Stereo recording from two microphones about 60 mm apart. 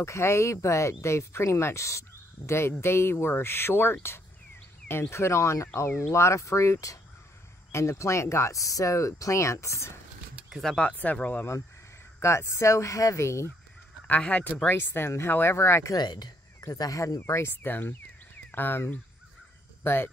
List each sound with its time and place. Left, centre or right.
0.0 s speech: left
7.7 s speech: left
10.8 s speech: left
12.2 s speech: left
14.0 s a man's voice: left
14.7 s speech: left
16.6 s speech: left
17.6 s speech: left